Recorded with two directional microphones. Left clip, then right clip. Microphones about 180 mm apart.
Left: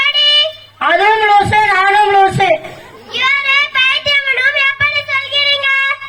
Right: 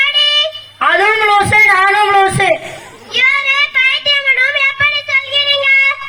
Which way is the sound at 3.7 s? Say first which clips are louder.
Even; 15° right (ahead or behind).